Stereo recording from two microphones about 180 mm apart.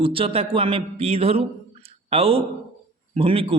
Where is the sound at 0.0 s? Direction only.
30° right (ahead or behind).